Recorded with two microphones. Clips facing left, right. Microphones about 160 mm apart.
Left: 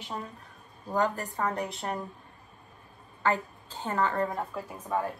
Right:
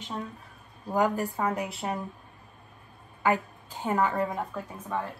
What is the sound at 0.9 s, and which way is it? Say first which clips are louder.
A woman's voice: right 3 dB; 10° right (ahead or behind).